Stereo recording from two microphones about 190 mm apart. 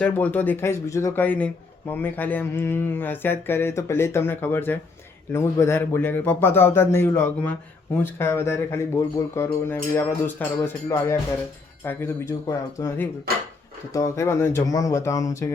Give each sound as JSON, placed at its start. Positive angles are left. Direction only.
{"t": 0.0, "sound": "speech", "side_deg": 10}
{"t": 13.3, "sound": "speech", "side_deg": -50}
{"t": 13.9, "sound": "speech", "side_deg": 15}